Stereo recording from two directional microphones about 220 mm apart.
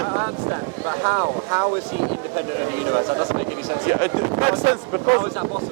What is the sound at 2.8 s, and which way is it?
Speech, 25° right (ahead or behind).